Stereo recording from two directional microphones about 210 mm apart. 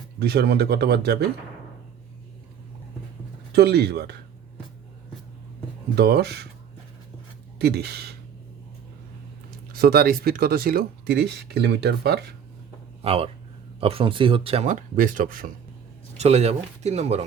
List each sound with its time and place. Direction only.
0.2 s speech: 50° right (ahead or behind)
3.5 s speech: 50° right (ahead or behind)
6.0 s speech: 50° right (ahead or behind)
7.6 s speech: 50° right (ahead or behind)
9.7 s speech: 45° right (ahead or behind)
13.0 s speech: 25° right (ahead or behind)
16.1 s speech: 30° right (ahead or behind)